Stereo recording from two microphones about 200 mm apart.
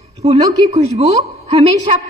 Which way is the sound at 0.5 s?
30° right (ahead or behind).